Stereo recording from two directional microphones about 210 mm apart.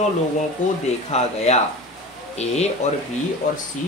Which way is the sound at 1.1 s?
30° left (ahead or behind).